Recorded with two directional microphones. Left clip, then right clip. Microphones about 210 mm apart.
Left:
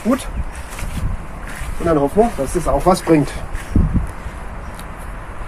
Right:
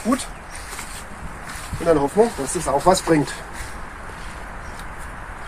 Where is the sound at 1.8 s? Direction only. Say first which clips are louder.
Left 2 dB; 35° left (ahead or behind).